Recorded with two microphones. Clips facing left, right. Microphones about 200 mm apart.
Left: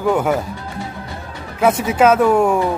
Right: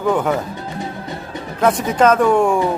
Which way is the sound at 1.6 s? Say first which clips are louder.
Left 1 dB; 5° left (ahead or behind).